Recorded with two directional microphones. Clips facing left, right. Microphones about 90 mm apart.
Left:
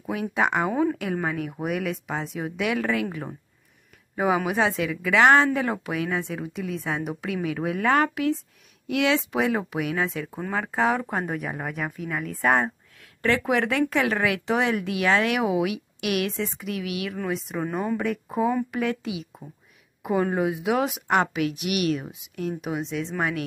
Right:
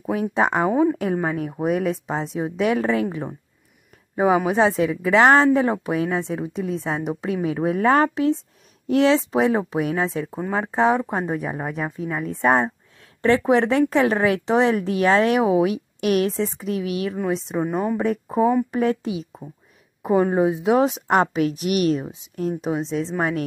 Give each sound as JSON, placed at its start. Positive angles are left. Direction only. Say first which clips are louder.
{"t": 0.0, "sound": "speech", "louder": "right 4 dB", "side_deg": -35}
{"t": 4.1, "sound": "a sound", "louder": "right 5 dB", "side_deg": -30}
{"t": 4.5, "sound": "speech", "louder": "right 5 dB", "side_deg": -30}